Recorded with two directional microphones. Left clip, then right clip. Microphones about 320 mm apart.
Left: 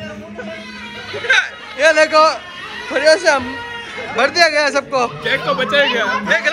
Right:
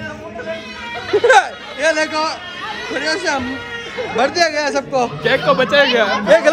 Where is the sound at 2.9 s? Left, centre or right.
Centre.